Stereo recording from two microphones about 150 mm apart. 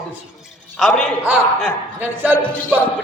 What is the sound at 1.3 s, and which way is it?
Music, 10° right (ahead or behind).